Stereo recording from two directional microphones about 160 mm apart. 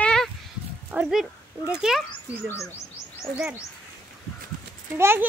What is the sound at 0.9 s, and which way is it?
Dog, 5° right (ahead or behind).